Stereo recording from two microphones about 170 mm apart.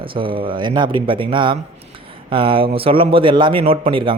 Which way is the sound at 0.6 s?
25° right (ahead or behind).